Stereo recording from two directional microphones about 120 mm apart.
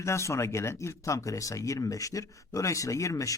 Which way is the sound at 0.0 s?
25° left (ahead or behind).